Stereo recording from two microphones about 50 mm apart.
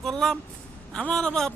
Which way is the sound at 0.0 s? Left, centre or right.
Centre.